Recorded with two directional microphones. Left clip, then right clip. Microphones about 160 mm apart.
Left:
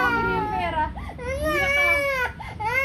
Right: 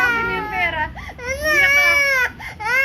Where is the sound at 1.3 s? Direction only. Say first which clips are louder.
Right 8 dB; 35° right (ahead or behind).